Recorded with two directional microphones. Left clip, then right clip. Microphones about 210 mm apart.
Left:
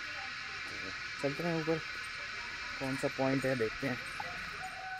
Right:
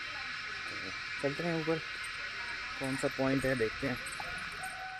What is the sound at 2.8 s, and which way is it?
Speech, 5° right (ahead or behind).